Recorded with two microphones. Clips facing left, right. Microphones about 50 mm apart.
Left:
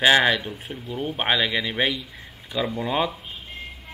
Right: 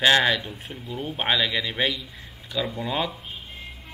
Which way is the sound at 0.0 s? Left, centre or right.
Centre.